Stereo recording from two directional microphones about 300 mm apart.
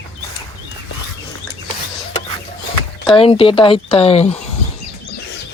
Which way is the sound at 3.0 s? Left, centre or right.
Centre.